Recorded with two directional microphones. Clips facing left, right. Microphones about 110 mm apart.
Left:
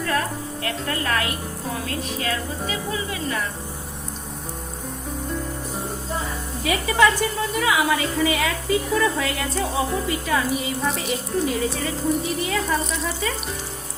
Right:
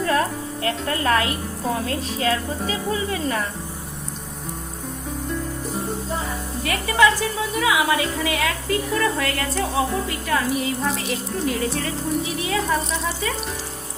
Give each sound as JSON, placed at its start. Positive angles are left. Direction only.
{"t": 0.6, "sound": "a woman's voice", "side_deg": -30}
{"t": 6.7, "sound": "a woman's voice", "side_deg": 0}